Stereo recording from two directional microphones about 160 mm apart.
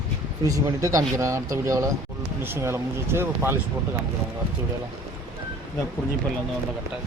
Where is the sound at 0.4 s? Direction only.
20° right (ahead or behind).